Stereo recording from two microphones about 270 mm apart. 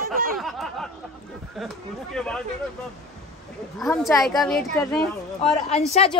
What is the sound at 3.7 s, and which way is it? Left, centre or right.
A man's voice, centre.